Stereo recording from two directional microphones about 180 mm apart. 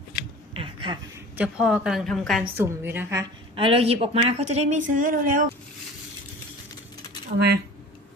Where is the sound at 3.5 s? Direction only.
30° right (ahead or behind); by 5.5 s 50° right (ahead or behind).